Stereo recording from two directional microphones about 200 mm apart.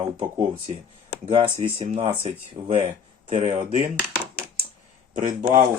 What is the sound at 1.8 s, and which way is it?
Speech, 35° right (ahead or behind).